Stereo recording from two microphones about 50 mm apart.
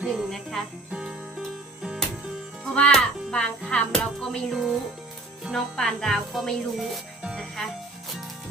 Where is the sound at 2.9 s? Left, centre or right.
Centre.